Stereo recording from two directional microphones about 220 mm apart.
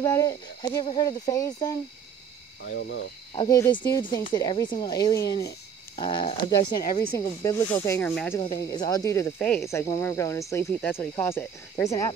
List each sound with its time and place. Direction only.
0.0 s speech: 15° left (ahead or behind)
2.6 s speech: 55° left (ahead or behind)
3.3 s speech: 15° left (ahead or behind)